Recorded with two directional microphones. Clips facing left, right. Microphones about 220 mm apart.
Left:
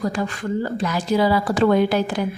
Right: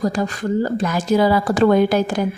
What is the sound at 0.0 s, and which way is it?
A woman's voice, 40° right (ahead or behind).